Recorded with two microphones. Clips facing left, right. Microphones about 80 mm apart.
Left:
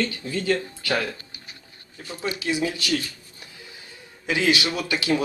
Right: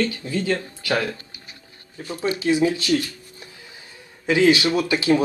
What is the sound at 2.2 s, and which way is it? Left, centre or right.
Speech, right.